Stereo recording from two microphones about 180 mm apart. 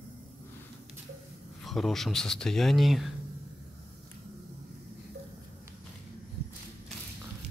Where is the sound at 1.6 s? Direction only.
Centre (ahead or behind).